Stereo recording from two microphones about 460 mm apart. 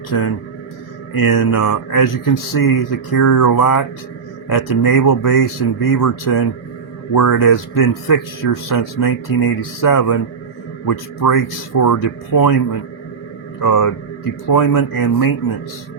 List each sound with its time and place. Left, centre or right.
0.1 s a man's voice: left
13.6 s a man's voice: left